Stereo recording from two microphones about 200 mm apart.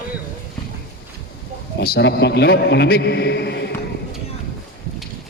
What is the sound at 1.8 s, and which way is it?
A man's voice, 55° left (ahead or behind).